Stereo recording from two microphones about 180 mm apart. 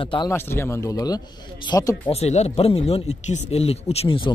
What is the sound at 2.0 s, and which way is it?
Speech, 35° left (ahead or behind).